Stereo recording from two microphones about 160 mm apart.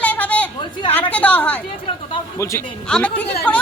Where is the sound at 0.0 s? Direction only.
10° left (ahead or behind).